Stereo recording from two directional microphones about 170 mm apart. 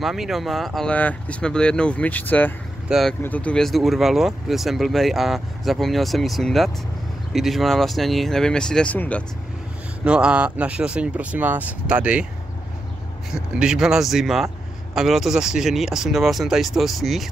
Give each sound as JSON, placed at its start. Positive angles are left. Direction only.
{"t": 0.0, "sound": "speech", "side_deg": 0}
{"t": 10.0, "sound": "speech", "side_deg": -5}
{"t": 13.3, "sound": "speech", "side_deg": -5}